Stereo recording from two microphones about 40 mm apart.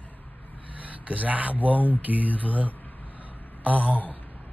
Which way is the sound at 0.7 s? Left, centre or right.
Right.